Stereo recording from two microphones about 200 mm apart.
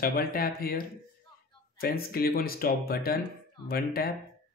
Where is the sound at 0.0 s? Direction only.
45° left (ahead or behind).